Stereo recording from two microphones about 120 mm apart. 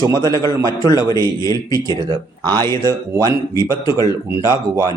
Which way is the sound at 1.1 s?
30° left (ahead or behind).